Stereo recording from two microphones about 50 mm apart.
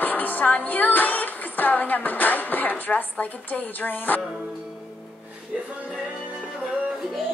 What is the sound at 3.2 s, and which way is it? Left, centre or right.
A woman's voice, left.